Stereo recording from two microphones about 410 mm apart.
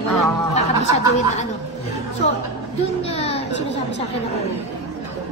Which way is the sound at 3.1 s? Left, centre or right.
Centre.